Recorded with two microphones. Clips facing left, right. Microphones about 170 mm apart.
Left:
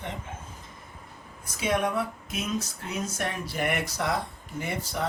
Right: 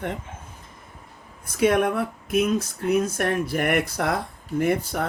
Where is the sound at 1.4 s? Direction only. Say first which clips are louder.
Right 7 dB; 55° right (ahead or behind).